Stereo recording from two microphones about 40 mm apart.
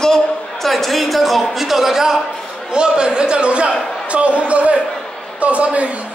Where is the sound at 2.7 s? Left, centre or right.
Right.